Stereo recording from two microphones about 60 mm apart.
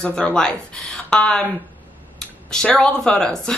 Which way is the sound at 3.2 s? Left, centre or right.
Centre.